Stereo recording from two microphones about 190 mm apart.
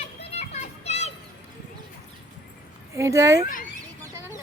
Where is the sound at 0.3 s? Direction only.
35° left (ahead or behind).